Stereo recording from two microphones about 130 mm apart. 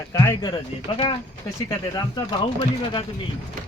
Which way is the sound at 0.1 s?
25° left (ahead or behind).